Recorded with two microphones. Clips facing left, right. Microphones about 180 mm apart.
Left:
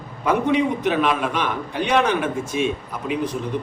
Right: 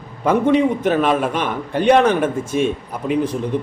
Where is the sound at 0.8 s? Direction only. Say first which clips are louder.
Right 4 dB; 45° right (ahead or behind).